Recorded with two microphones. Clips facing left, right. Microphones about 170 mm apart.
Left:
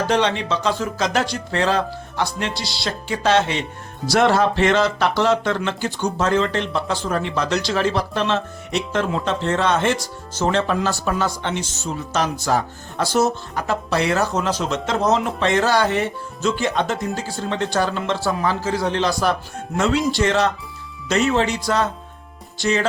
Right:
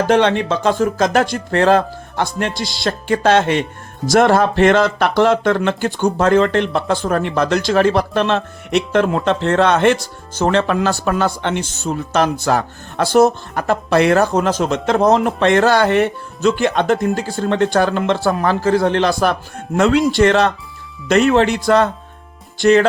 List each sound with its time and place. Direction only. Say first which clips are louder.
0.1 s speech: right 6 dB; 55° right (ahead or behind)